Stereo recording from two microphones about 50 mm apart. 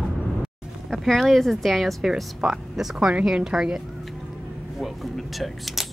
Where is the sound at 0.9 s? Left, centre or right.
Centre.